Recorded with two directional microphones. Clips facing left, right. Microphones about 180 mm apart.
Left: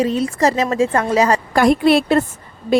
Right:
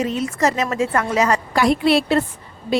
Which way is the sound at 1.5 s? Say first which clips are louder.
Left 4 dB; 50° left (ahead or behind).